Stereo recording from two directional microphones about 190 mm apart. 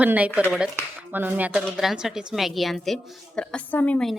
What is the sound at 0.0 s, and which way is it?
Speech, 10° right (ahead or behind).